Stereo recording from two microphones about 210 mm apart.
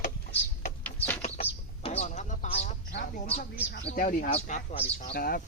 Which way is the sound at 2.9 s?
45° left (ahead or behind).